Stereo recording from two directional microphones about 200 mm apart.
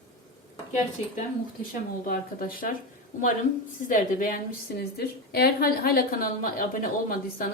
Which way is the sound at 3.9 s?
45° left (ahead or behind).